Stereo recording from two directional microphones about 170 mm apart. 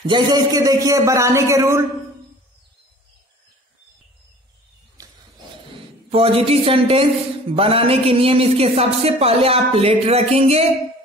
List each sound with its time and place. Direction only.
0.0 s a man's voice: 25° right (ahead or behind)
5.0 s a sound: 20° right (ahead or behind)
6.0 s a man's voice: 35° right (ahead or behind)